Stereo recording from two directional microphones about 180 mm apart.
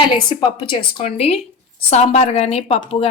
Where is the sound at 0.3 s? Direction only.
25° left (ahead or behind).